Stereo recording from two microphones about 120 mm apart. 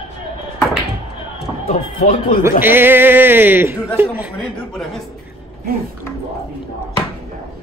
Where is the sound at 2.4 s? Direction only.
20° right (ahead or behind).